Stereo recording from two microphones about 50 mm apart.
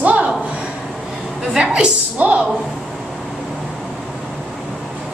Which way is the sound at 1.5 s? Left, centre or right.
Centre.